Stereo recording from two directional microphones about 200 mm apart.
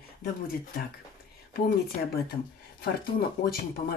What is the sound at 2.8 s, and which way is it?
Speech, 50° left (ahead or behind).